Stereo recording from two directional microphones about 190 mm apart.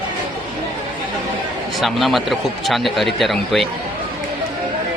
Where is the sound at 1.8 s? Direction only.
Centre (ahead or behind).